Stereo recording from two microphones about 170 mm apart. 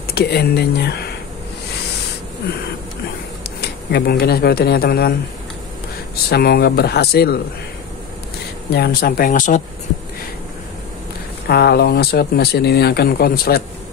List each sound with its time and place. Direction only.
0.1 s speech: 70° left (ahead or behind)
3.6 s speech: 70° left (ahead or behind)
6.2 s speech: 65° left (ahead or behind)
8.7 s speech: 65° left (ahead or behind)
11.4 s speech: 70° left (ahead or behind)